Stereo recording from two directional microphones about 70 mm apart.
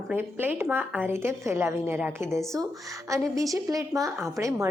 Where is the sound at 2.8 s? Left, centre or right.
Right.